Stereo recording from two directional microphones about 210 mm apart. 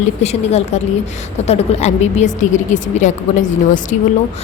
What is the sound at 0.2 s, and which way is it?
A woman's voice, 30° left (ahead or behind).